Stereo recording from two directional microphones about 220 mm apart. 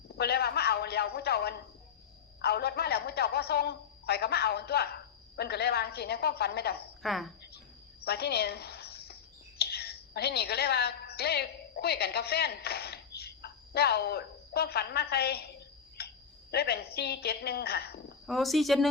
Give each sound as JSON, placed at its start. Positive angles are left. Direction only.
{"t": 0.2, "sound": "a sound", "side_deg": 45}
{"t": 2.4, "sound": "a man's voice", "side_deg": 45}
{"t": 7.0, "sound": "speech", "side_deg": 0}
{"t": 8.0, "sound": "a sound", "side_deg": 45}
{"t": 9.6, "sound": "a woman's voice", "side_deg": 45}
{"t": 18.3, "sound": "speech", "side_deg": 0}